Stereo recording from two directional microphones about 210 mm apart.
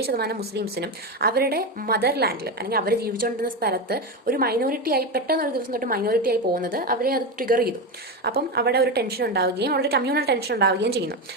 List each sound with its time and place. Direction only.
0.0 s speech: 50° right (ahead or behind)